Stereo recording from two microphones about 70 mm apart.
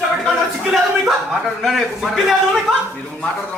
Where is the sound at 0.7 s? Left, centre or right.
Centre.